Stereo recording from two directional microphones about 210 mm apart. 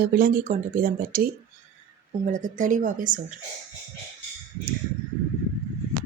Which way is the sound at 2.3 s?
35° right (ahead or behind).